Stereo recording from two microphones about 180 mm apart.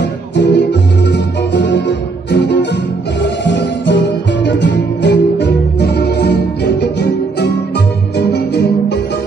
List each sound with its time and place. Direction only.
0.0 s music: 75° left (ahead or behind)